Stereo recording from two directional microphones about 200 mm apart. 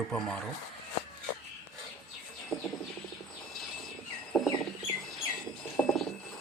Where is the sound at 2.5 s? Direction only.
15° left (ahead or behind).